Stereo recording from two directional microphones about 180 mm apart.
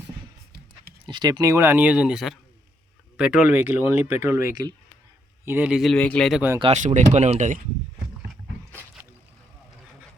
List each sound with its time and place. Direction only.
1.0 s a man's voice: 25° right (ahead or behind); by 6.4 s centre (ahead or behind)
6.6 s speech: 35° right (ahead or behind)